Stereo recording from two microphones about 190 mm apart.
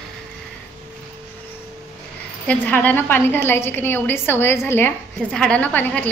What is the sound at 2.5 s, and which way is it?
A woman's voice, 5° left (ahead or behind).